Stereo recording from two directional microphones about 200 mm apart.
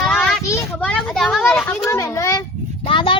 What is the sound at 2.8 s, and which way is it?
Speech, 25° left (ahead or behind).